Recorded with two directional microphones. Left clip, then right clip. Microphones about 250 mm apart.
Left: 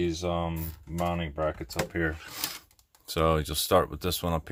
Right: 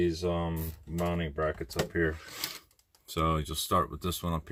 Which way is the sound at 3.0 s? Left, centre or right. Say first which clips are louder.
Left 5 dB; left.